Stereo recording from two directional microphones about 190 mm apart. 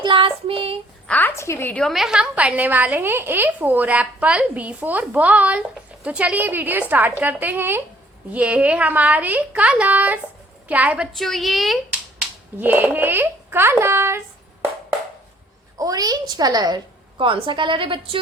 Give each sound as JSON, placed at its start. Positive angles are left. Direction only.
{"t": 0.0, "sound": "child singing", "side_deg": -25}
{"t": 1.0, "sound": "a woman's voice", "side_deg": 10}
{"t": 15.8, "sound": "a woman's voice", "side_deg": -20}